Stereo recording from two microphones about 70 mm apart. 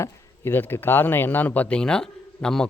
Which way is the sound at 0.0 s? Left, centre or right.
Left.